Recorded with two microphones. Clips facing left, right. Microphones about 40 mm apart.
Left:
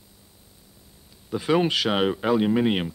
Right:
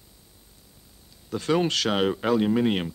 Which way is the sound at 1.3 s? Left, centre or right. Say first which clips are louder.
Left 2 dB; centre.